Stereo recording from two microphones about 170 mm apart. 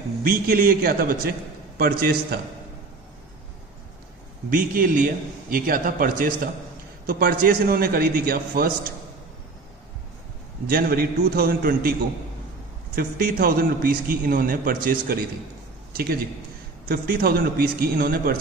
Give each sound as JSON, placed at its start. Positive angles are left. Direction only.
{"t": 0.2, "sound": "a man's voice", "side_deg": -60}
{"t": 4.5, "sound": "a man's voice", "side_deg": -55}
{"t": 10.7, "sound": "a man's voice", "side_deg": -60}
{"t": 12.9, "sound": "a man's voice", "side_deg": -60}